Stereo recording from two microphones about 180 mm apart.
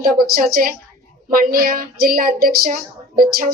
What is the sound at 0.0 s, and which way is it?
A woman's voice, 55° right (ahead or behind).